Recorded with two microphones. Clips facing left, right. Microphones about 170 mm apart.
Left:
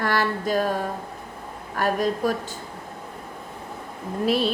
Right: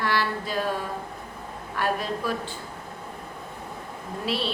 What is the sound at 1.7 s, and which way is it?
Speech, 45° left (ahead or behind).